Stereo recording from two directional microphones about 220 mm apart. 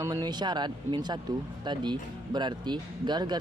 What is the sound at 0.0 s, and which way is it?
Speech, 15° right (ahead or behind).